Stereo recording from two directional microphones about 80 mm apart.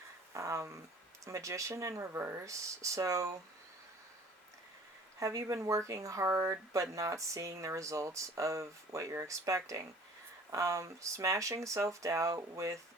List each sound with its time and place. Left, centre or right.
0.3 s speech: right
5.2 s speech: right